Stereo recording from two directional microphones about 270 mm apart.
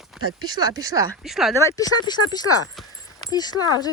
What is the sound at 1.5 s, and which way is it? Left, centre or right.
Speech, centre.